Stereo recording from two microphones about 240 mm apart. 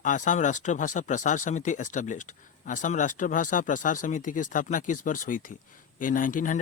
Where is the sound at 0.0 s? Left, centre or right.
Left.